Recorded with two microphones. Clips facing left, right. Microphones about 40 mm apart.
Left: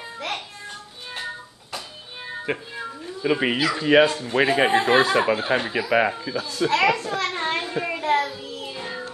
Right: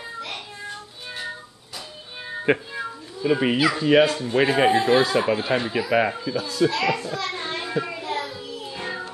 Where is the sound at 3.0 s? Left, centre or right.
Centre.